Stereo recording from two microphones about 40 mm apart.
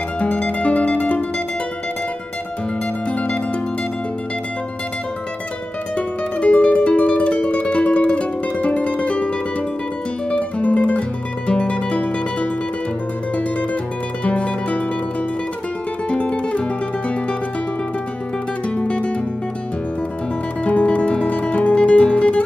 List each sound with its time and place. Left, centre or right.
0.2 s music: left
3.1 s music: left
5.9 s music: left
10.3 s music: left
14.2 s music: left
16.1 s music: left
18.8 s music: left
20.6 s guitar: left